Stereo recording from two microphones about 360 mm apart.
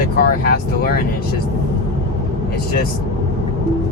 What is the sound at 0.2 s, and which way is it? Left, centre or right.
Speech, left.